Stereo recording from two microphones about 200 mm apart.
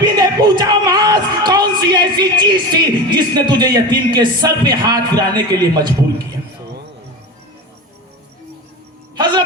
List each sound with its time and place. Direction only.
0.0 s speech: 20° right (ahead or behind)